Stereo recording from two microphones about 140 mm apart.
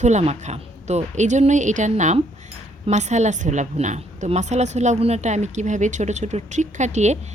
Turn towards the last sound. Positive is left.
turn(degrees=-55)  # may be behind; listen again after turning